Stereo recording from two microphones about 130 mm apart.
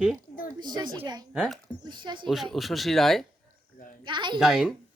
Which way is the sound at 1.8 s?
35° right (ahead or behind).